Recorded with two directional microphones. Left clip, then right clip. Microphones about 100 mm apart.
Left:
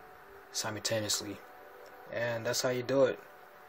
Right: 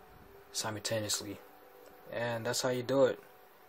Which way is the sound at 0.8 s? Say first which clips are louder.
Left 4 dB; 5° right (ahead or behind).